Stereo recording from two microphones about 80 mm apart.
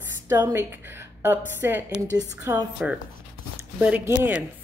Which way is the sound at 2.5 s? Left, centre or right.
Right.